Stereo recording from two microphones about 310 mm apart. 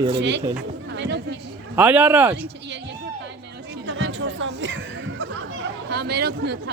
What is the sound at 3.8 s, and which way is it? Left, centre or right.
Chuckle, right.